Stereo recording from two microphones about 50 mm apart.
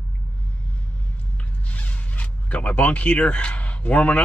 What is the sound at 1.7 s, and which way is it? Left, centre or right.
Zipper, left.